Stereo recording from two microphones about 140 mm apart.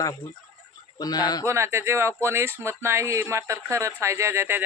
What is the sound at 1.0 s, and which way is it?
Speech, 30° left (ahead or behind).